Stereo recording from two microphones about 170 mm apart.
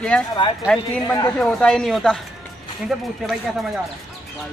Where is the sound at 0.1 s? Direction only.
5° left (ahead or behind).